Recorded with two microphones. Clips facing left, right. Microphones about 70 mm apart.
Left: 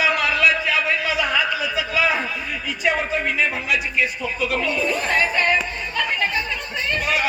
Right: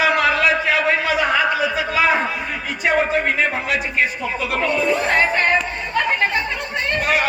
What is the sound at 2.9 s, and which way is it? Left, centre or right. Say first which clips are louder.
Speech: right 4 dB; right.